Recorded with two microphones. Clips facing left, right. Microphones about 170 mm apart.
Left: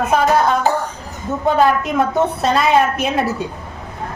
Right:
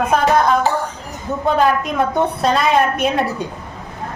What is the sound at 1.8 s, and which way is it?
A woman's voice, centre (ahead or behind).